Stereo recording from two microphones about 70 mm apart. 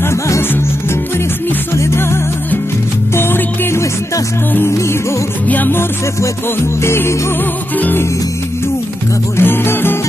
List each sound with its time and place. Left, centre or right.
0.0 s music: left
1.7 s music: left
3.2 s music: left
5.5 s music: left
6.8 s music: left
7.7 s music: left
9.4 s music: left